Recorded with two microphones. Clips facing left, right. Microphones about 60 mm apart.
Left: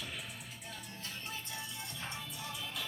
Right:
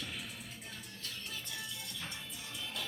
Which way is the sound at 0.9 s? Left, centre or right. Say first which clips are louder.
Left 2 dB; left.